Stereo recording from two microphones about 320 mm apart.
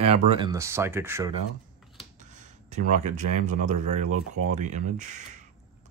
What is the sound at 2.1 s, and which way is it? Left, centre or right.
Speech, right.